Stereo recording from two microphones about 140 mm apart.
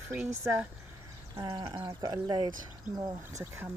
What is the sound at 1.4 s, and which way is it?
Speech, 35° right (ahead or behind).